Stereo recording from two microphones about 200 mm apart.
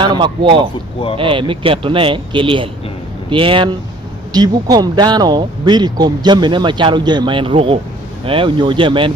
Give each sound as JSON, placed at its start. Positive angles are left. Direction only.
{"t": 0.0, "sound": "speech", "side_deg": -20}